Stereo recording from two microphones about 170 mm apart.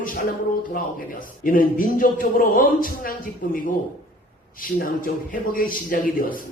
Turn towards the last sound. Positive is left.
turn(degrees=55)  # may be behind; listen again after turning